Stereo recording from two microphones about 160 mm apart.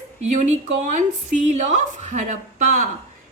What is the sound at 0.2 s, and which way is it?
A woman's voice, 45° right (ahead or behind).